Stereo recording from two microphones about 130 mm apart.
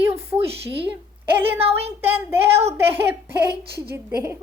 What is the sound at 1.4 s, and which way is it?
Speech, 50° right (ahead or behind).